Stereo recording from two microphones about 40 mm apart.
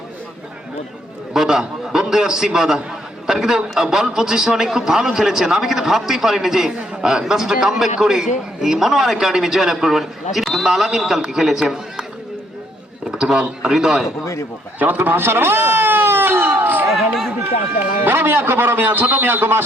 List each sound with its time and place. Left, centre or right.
1.3 s a man's voice: centre
13.1 s a man's voice: centre
14.8 s a sound: right
16.9 s speech: centre
18.0 s a man's voice: right
19.3 s speech: right